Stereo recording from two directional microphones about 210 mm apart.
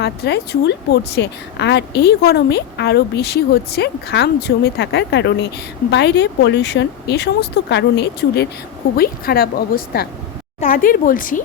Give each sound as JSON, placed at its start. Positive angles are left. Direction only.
{"t": 0.0, "sound": "speech", "side_deg": 50}